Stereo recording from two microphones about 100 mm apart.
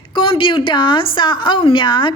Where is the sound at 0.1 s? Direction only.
55° left (ahead or behind).